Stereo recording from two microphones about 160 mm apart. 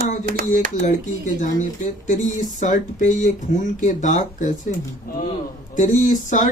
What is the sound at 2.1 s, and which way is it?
Speech, 55° left (ahead or behind).